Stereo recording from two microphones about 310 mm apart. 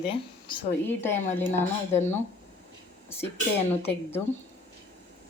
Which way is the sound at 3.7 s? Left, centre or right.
Centre.